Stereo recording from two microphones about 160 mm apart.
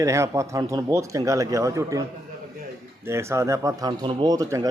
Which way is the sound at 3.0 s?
15° right (ahead or behind).